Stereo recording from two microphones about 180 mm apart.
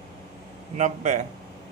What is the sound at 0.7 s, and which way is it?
Speech, 45° right (ahead or behind).